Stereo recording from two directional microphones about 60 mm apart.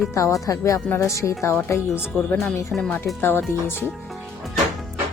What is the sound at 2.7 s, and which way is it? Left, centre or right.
Speech, centre.